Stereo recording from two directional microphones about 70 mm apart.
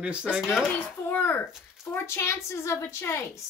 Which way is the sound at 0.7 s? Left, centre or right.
Left.